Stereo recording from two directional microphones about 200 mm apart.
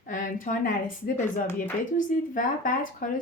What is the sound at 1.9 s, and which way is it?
Speech, 40° left (ahead or behind).